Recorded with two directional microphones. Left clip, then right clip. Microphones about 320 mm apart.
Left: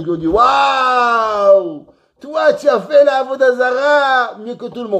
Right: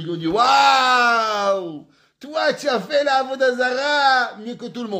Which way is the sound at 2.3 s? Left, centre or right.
Right.